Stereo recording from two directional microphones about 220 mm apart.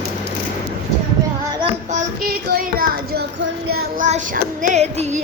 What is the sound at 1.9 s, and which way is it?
Child singing, 40° right (ahead or behind).